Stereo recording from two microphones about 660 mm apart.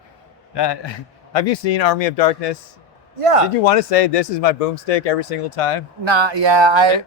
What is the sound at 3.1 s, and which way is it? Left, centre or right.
Speech, right.